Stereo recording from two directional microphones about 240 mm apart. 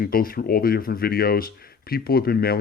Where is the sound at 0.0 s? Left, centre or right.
Left.